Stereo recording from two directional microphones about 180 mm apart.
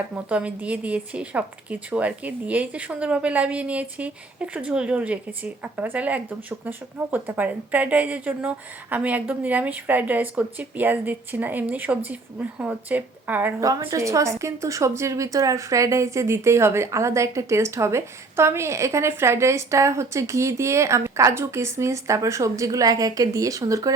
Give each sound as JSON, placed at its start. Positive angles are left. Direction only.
{"t": 0.3, "sound": "a woman's voice", "side_deg": -5}